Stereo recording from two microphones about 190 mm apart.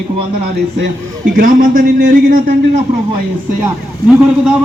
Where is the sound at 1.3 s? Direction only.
45° right (ahead or behind).